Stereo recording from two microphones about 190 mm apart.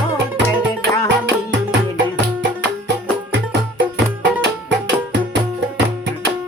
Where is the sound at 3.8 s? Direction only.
70° right (ahead or behind).